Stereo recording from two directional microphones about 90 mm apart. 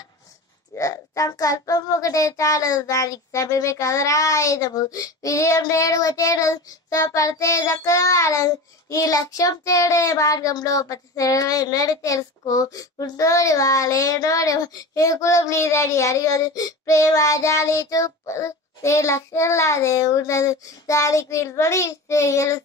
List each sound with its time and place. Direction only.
0.7 s a child's voice: 40° left (ahead or behind)